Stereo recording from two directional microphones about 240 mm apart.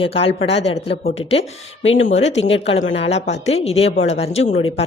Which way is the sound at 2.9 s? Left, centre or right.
Left.